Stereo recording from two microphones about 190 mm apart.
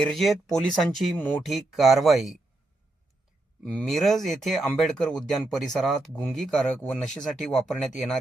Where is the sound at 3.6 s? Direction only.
5° left (ahead or behind).